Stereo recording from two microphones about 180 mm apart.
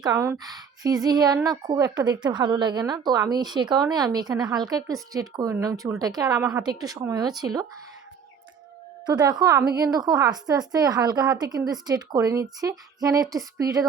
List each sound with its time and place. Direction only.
0.1 s a woman's voice: 15° right (ahead or behind)
9.0 s a woman's voice: 20° right (ahead or behind)